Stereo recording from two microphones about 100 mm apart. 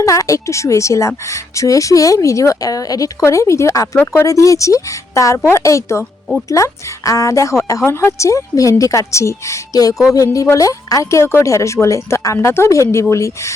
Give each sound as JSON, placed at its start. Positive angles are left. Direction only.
{"t": 0.0, "sound": "a woman's voice", "side_deg": 35}
{"t": 4.3, "sound": "a woman's voice", "side_deg": 35}